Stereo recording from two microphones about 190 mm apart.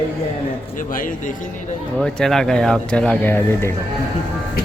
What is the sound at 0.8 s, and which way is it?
Speech, 45° left (ahead or behind).